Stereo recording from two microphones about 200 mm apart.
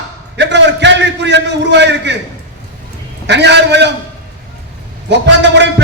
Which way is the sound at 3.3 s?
60° right (ahead or behind).